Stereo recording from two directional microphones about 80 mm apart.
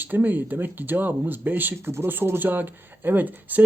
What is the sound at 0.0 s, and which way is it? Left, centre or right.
Speech, right.